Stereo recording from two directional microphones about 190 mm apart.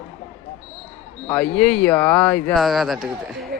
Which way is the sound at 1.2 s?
5° left (ahead or behind).